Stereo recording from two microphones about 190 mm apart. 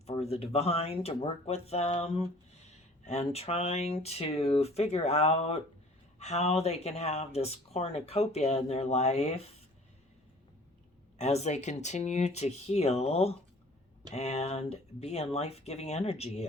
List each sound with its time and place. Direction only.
0.0 s speech: 35° left (ahead or behind)
11.2 s speech: 35° left (ahead or behind)